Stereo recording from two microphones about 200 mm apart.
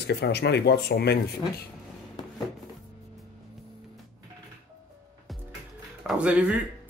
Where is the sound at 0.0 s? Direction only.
55° left (ahead or behind).